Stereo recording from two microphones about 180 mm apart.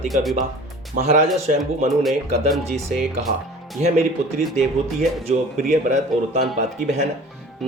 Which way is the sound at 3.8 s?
35° right (ahead or behind).